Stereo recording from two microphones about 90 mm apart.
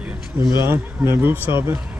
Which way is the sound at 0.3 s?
20° right (ahead or behind).